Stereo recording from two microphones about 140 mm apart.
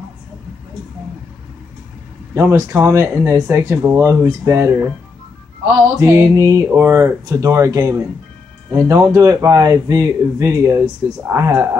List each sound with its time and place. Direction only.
2.3 s speech: 20° right (ahead or behind)
5.9 s speech: 20° right (ahead or behind)